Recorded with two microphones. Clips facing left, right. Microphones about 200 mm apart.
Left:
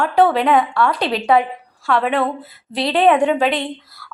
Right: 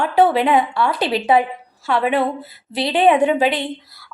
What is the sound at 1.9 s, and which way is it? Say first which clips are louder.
A woman's voice: even; 5° right (ahead or behind).